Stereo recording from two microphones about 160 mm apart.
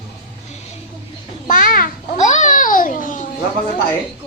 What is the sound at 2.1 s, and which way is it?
Babbling, 50° left (ahead or behind).